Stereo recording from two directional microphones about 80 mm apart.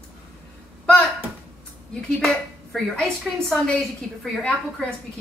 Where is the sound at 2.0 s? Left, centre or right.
Centre.